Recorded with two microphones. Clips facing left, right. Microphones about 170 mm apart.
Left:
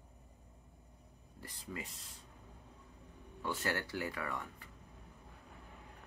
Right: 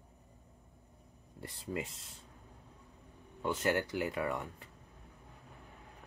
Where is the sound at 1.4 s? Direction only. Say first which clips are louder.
Right 7 dB; 25° right (ahead or behind).